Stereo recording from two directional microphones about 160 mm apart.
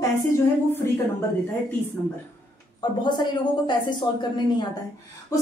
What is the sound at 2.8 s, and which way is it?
A woman's voice, 30° left (ahead or behind).